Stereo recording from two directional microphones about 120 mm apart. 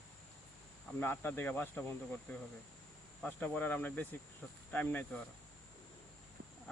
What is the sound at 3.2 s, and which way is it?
Speech, 15° left (ahead or behind).